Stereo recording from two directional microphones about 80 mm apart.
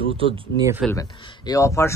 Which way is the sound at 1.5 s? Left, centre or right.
Left.